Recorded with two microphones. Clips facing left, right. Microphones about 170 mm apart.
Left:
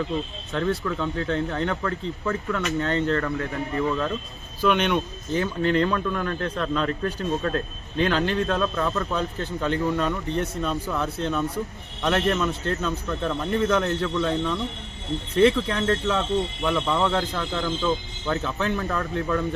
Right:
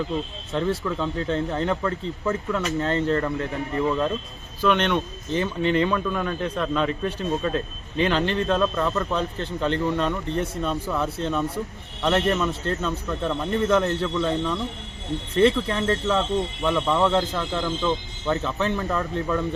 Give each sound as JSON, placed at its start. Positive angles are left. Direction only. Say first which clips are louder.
{"t": 0.8, "sound": "speech", "louder": "right 1 dB", "side_deg": -20}
{"t": 1.6, "sound": "speech", "louder": "right 2 dB", "side_deg": -10}
{"t": 2.6, "sound": "speech", "louder": "even", "side_deg": -35}
{"t": 3.2, "sound": "speech", "louder": "right 1 dB", "side_deg": -20}
{"t": 4.6, "sound": "speech", "louder": "even", "side_deg": 5}